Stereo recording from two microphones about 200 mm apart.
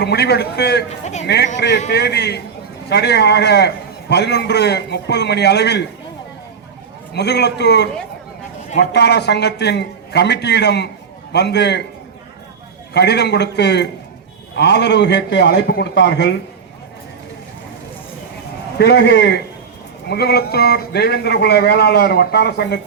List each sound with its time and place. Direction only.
0.0 s a man's voice: 55° left (ahead or behind)
0.9 s a man's voice: 35° left (ahead or behind)
1.5 s a man's voice: 60° left (ahead or behind)
7.1 s a man's voice: 55° left (ahead or behind)
12.9 s a man's voice: 55° left (ahead or behind)
18.8 s a man's voice: 55° left (ahead or behind)